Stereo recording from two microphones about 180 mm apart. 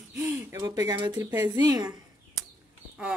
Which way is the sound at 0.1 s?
15° right (ahead or behind).